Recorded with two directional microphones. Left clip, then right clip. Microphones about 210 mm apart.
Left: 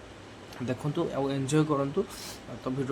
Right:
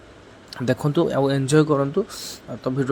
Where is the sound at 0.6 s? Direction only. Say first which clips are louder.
Right 11 dB; 30° right (ahead or behind).